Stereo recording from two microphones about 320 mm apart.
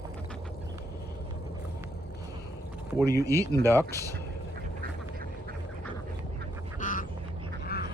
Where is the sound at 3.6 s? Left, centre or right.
Centre.